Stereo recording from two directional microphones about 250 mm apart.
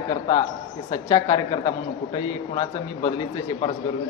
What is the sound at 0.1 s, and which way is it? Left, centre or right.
A man's voice, centre.